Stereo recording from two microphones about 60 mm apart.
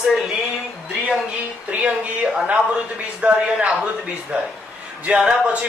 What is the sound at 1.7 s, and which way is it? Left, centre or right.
Speech, right.